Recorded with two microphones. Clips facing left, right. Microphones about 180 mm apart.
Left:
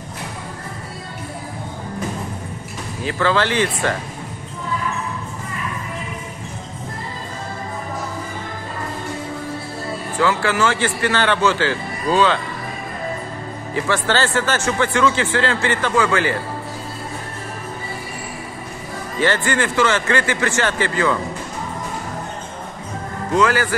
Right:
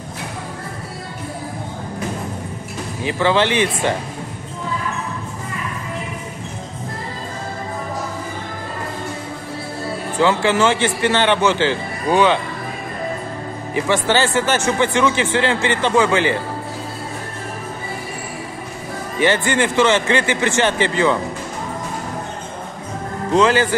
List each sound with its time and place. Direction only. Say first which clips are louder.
3.0 s speech: right 2 dB; 20° right (ahead or behind)
10.1 s speech: right 3 dB; 20° right (ahead or behind)
13.7 s speech: right 2 dB; 20° right (ahead or behind)
19.1 s speech: right 2 dB; 15° right (ahead or behind)
23.3 s speech: right 3 dB; 20° right (ahead or behind)